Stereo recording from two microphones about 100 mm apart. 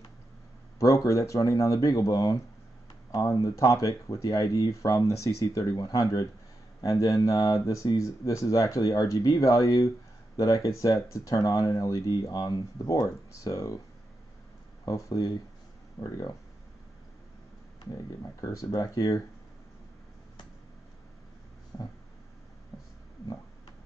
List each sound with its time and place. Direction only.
0.7 s speech: 35° left (ahead or behind)
14.9 s speech: 35° left (ahead or behind)
17.9 s speech: 35° left (ahead or behind)
21.7 s a sound: 35° left (ahead or behind)